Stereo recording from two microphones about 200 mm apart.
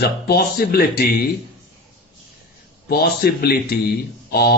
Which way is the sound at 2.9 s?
50° left (ahead or behind).